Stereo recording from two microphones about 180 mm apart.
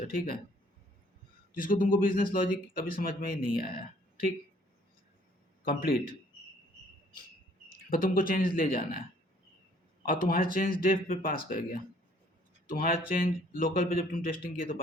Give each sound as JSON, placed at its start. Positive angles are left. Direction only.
{"t": 1.5, "sound": "speech", "side_deg": 50}
{"t": 5.6, "sound": "speech", "side_deg": 55}
{"t": 7.9, "sound": "speech", "side_deg": 50}
{"t": 10.1, "sound": "speech", "side_deg": 50}